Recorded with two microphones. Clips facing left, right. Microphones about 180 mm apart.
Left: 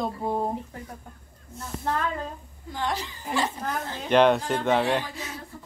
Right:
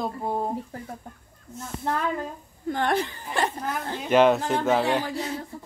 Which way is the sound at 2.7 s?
60° right (ahead or behind).